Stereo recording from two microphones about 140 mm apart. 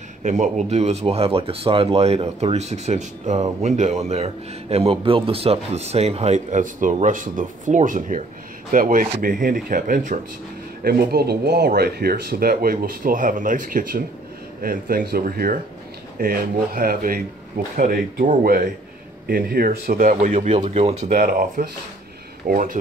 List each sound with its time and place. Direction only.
0.2 s speech: 60° right (ahead or behind); by 9.1 s 75° right (ahead or behind)
9.2 s speech: 90° right
10.8 s speech: 90° right; by 22.8 s 75° right (ahead or behind)